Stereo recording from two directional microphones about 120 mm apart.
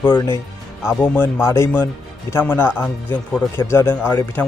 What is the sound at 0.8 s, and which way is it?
Speech, 20° left (ahead or behind).